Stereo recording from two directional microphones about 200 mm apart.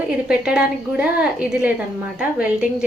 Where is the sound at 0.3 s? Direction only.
5° right (ahead or behind).